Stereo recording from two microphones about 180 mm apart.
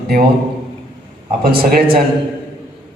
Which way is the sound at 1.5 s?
55° right (ahead or behind).